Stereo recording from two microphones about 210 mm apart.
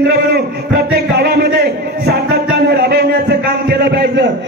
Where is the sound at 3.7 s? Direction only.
50° right (ahead or behind).